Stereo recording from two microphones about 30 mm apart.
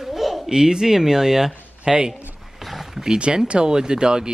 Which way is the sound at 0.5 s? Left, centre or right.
Right.